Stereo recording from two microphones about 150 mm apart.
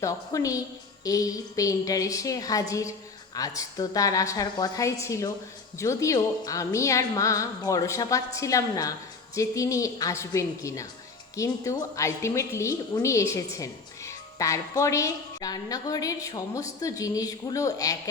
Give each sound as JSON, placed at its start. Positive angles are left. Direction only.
{"t": 0.0, "sound": "a woman's voice", "side_deg": 20}